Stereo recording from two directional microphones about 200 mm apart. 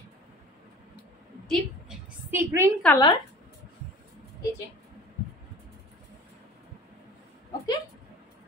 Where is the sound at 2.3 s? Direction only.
10° right (ahead or behind).